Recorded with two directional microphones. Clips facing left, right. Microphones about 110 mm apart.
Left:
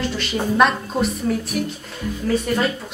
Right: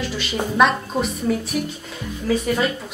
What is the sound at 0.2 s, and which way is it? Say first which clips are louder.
A woman's voice: even; centre (ahead or behind).